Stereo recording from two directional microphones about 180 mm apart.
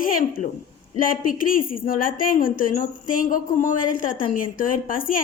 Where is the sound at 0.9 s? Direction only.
50° left (ahead or behind).